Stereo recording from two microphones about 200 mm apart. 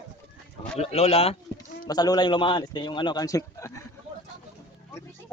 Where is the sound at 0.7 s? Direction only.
30° left (ahead or behind).